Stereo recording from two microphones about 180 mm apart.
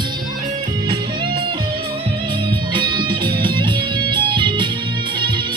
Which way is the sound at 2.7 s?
25° right (ahead or behind).